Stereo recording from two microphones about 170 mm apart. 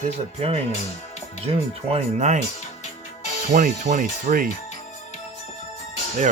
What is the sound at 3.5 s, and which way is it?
Speech, 50° right (ahead or behind).